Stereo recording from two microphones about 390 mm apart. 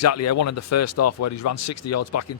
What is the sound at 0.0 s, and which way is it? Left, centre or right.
Speech, left.